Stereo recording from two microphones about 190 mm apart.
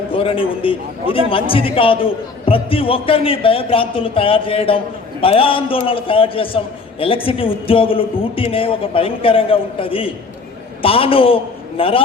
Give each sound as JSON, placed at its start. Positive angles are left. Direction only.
{"t": 0.1, "sound": "a man's voice", "side_deg": 30}